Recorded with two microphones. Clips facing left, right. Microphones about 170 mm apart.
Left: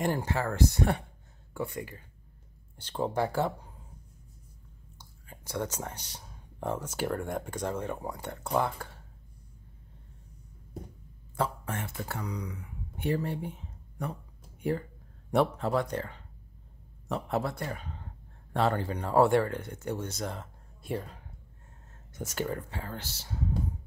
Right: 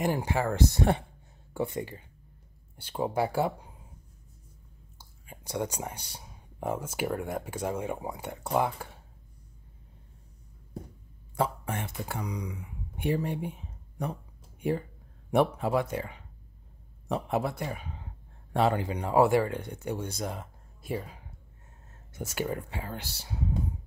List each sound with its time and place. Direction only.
0.0 s speech: 10° right (ahead or behind)
2.8 s speech: 10° right (ahead or behind)
4.9 s speech: 15° right (ahead or behind)
11.3 s speech: 15° right (ahead or behind)